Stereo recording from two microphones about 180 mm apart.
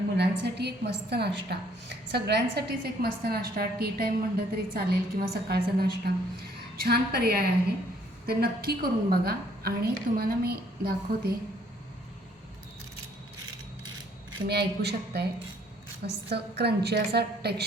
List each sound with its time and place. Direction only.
0.2 s a woman's voice: 70° right (ahead or behind)
14.4 s a woman's voice: 65° right (ahead or behind)